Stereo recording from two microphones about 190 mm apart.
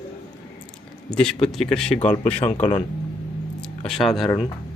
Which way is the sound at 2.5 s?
40° left (ahead or behind).